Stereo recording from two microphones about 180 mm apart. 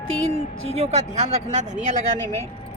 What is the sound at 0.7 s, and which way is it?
Speech, 35° right (ahead or behind).